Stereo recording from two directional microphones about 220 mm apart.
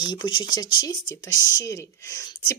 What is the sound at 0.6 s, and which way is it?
Speech, 20° left (ahead or behind).